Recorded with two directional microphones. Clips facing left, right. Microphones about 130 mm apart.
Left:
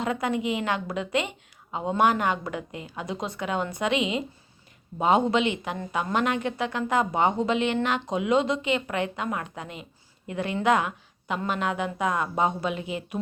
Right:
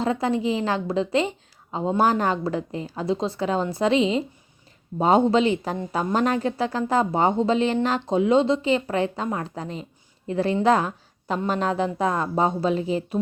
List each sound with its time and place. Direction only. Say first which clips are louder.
0.0 s a woman's voice: right 4 dB; 30° right (ahead or behind)